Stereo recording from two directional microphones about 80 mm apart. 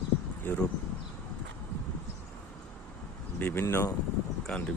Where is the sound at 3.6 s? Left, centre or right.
Left.